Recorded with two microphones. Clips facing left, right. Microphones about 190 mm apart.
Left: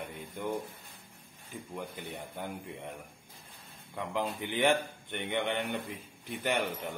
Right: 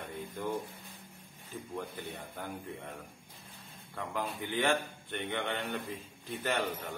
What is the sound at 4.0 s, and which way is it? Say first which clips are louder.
Speech: left 3 dB; 20° left (ahead or behind).